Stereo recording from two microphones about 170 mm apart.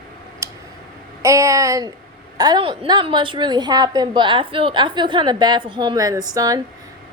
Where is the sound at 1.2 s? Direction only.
20° right (ahead or behind).